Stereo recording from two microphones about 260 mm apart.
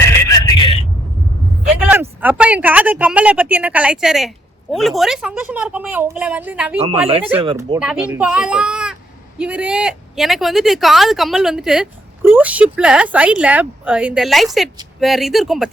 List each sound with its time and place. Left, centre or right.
0.3 s vehicle: centre
1.6 s speech: centre
6.7 s speech: right
7.8 s speech: centre